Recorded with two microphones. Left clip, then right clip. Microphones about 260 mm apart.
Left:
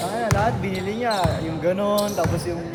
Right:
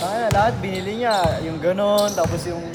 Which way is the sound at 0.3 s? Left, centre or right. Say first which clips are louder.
Right 4 dB; right.